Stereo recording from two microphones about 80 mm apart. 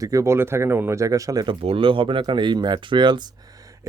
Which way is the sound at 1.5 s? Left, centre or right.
Right.